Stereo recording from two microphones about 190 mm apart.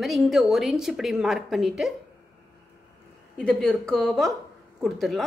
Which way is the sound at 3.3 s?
5° left (ahead or behind).